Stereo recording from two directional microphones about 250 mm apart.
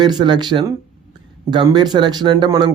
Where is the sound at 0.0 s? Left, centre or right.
Centre.